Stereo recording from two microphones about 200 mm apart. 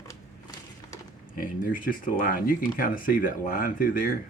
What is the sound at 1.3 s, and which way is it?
Speech, 45° left (ahead or behind).